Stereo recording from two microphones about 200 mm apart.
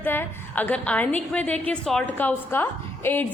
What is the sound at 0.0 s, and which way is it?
A woman's voice, 10° left (ahead or behind).